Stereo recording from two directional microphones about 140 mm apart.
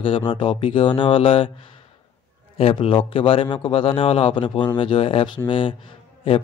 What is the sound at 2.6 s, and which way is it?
A man's voice, 40° left (ahead or behind).